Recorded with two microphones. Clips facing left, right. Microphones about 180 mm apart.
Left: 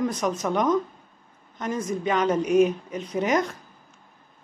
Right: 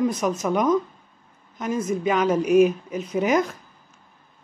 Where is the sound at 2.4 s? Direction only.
30° left (ahead or behind).